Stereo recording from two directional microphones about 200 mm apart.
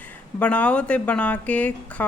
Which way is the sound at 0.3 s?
5° left (ahead or behind).